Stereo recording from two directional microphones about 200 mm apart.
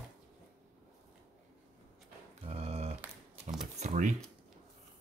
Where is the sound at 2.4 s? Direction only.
30° right (ahead or behind).